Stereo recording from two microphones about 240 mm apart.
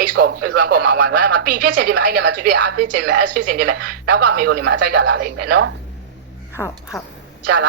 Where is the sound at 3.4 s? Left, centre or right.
Right.